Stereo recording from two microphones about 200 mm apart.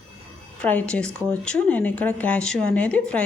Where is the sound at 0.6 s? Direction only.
5° left (ahead or behind).